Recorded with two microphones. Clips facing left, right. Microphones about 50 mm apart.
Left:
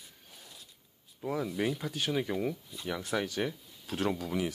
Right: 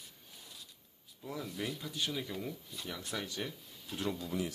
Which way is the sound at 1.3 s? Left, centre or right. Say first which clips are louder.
Left 8 dB; left.